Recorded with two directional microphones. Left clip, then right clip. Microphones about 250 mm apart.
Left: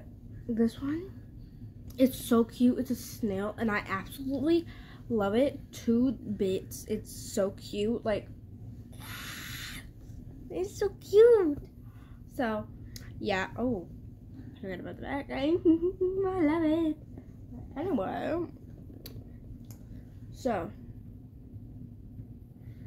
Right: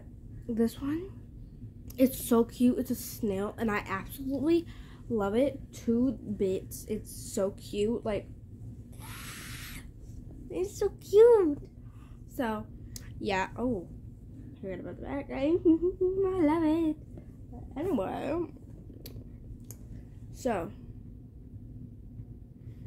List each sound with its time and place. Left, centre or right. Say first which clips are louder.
0.6 s speech: even; centre
9.0 s a sound: left 3 dB; centre
10.5 s a woman's voice: right 1 dB; centre
20.4 s speech: even; centre